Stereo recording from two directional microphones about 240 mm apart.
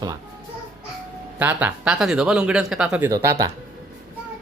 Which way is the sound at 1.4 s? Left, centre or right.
Centre.